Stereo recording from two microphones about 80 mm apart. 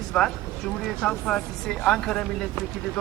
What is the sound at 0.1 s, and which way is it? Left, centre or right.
Speech, centre.